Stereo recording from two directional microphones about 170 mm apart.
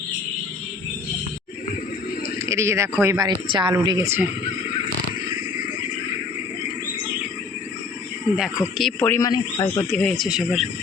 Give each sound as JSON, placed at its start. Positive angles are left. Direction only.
{"t": 2.5, "sound": "speech", "side_deg": -15}
{"t": 8.4, "sound": "speech", "side_deg": 0}
{"t": 9.9, "sound": "speech", "side_deg": 5}